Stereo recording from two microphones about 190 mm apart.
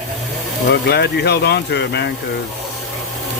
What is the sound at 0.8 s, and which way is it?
Speech, 60° left (ahead or behind).